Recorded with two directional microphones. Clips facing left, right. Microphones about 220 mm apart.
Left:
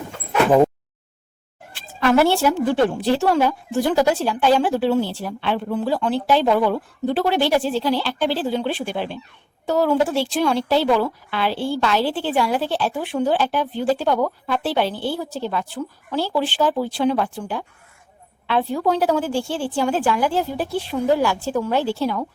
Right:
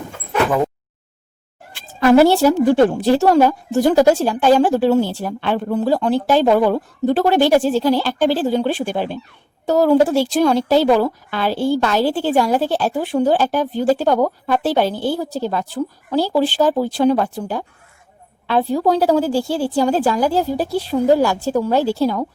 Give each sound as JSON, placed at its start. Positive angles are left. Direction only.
{"t": 2.0, "sound": "a woman's voice", "side_deg": -40}